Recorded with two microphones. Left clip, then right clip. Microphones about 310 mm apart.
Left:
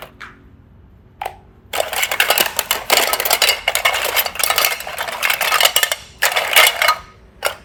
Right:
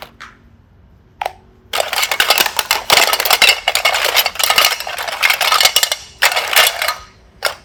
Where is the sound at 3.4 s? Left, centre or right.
Centre.